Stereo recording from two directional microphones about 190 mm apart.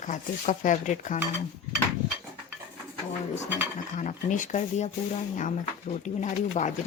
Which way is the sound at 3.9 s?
40° left (ahead or behind).